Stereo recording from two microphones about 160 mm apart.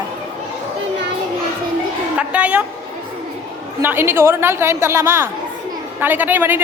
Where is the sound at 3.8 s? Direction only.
15° right (ahead or behind).